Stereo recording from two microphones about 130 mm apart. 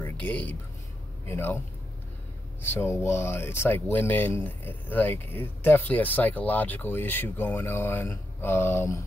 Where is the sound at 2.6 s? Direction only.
20° left (ahead or behind).